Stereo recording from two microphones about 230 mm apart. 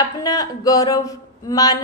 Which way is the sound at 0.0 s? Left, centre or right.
Centre.